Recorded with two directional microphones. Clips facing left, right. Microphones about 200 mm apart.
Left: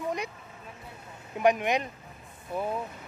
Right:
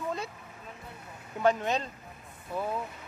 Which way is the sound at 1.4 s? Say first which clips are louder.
Left 2 dB; 15° left (ahead or behind).